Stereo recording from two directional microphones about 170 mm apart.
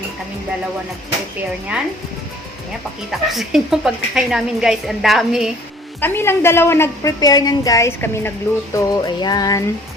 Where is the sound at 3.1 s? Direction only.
Centre (ahead or behind).